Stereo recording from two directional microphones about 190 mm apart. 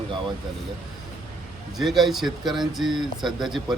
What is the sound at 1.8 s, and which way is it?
Speech, centre (ahead or behind).